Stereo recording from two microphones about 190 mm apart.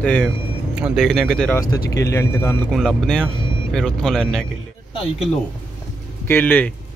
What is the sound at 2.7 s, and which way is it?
Speech, centre (ahead or behind).